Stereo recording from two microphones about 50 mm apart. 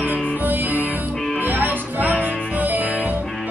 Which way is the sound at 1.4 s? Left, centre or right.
Right.